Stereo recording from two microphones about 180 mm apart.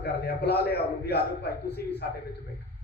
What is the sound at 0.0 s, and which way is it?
A man's voice, 65° left (ahead or behind).